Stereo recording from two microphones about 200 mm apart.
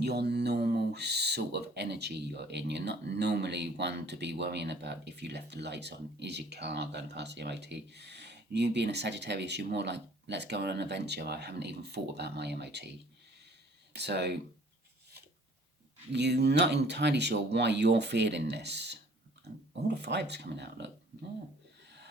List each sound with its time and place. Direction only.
0.0 s speech: 55° right (ahead or behind)
13.9 s speech: 55° right (ahead or behind)
16.1 s speech: 55° right (ahead or behind)